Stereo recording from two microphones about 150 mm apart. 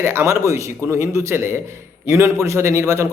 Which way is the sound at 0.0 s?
15° right (ahead or behind).